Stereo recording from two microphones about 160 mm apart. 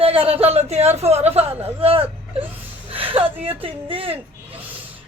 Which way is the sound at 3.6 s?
35° right (ahead or behind).